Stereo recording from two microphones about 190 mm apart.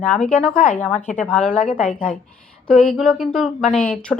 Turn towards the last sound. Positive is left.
turn(degrees=5)  # may be behind; listen again after turning